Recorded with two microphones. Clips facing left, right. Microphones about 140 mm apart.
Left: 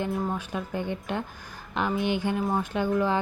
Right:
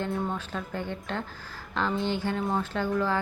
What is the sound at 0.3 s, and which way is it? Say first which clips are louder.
Speech: left 2 dB; 15° left (ahead or behind).